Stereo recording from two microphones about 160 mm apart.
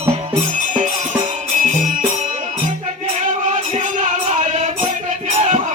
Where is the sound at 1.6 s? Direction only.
55° right (ahead or behind).